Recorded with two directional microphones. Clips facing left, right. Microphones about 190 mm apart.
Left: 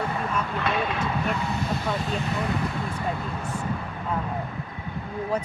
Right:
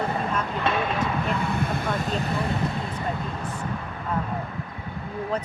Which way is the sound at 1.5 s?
55° right (ahead or behind).